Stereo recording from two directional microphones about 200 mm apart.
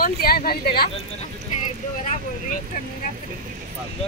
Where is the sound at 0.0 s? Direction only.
50° left (ahead or behind).